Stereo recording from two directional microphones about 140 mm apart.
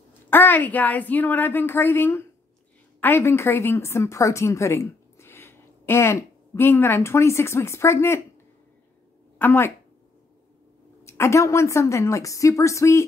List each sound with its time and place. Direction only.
0.3 s a woman's voice: 15° left (ahead or behind)
9.4 s a woman's voice: 15° left (ahead or behind)
11.1 s a woman's voice: 20° left (ahead or behind)